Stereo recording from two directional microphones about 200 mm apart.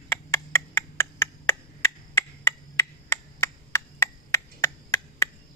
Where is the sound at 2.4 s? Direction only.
20° left (ahead or behind).